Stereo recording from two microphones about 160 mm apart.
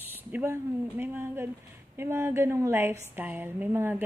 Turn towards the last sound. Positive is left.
turn(degrees=-10)  # may be behind; listen again after turning